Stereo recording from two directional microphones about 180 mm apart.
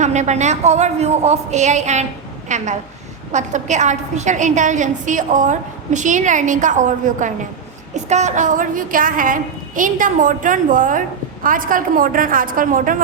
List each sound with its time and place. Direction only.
0.0 s a woman's voice: 40° right (ahead or behind)